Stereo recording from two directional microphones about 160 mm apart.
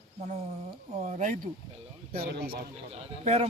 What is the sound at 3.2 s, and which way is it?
Speech, 45° right (ahead or behind).